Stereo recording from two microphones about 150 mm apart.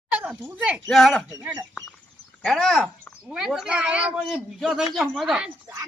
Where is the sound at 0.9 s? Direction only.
Centre (ahead or behind).